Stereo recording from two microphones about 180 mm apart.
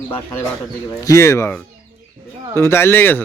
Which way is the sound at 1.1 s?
15° left (ahead or behind).